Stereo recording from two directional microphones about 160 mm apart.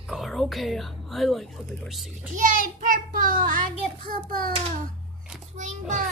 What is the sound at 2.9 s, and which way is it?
Child singing, 55° right (ahead or behind).